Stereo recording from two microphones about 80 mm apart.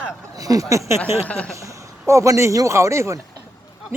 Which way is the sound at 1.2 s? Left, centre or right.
Centre.